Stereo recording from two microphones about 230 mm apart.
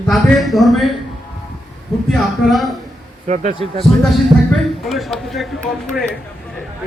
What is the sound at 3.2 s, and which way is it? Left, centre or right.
Speech, right.